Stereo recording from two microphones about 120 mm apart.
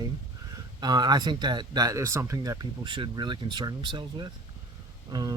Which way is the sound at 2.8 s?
40° right (ahead or behind).